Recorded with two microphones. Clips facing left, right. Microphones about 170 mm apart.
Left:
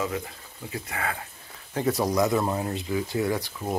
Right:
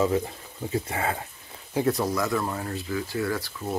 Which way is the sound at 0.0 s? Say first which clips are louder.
Right 6 dB; 30° right (ahead or behind).